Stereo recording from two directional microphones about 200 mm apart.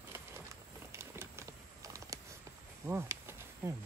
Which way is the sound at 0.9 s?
15° right (ahead or behind).